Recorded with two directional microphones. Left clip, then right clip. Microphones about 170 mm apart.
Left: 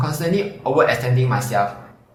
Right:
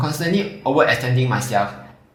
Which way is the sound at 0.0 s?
50° right (ahead or behind).